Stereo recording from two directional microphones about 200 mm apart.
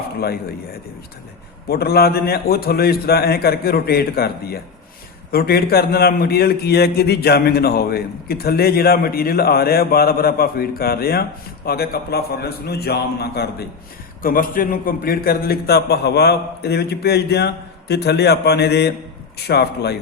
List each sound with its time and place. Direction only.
0.2 s a man's voice: 50° left (ahead or behind)